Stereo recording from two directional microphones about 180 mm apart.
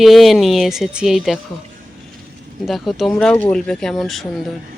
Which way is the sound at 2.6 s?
Centre (ahead or behind).